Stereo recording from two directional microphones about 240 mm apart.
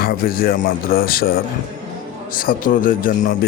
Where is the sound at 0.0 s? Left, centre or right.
Left.